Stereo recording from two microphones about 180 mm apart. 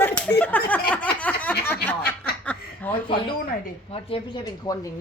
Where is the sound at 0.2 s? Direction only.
10° left (ahead or behind).